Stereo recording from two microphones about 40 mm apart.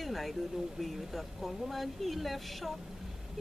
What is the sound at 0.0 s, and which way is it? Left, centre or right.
Speech, centre.